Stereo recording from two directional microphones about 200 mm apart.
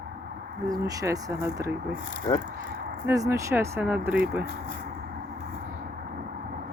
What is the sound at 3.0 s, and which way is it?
Speech, 15° right (ahead or behind).